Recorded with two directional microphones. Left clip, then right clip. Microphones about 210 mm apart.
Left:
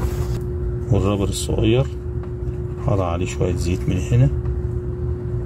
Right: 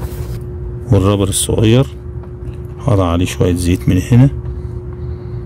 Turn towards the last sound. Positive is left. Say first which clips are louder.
# right 9 dB
turn(degrees=-50)  # may be behind; listen again after turning